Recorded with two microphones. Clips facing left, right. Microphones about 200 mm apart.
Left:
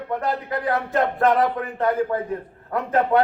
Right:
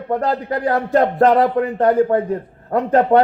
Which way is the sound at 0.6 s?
30° right (ahead or behind).